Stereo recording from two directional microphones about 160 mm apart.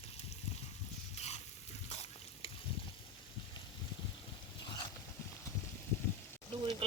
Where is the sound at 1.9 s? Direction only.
40° left (ahead or behind).